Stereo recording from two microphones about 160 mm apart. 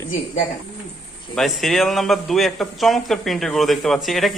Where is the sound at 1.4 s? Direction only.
Centre (ahead or behind).